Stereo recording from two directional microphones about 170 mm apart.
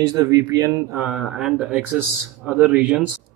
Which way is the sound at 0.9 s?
5° right (ahead or behind).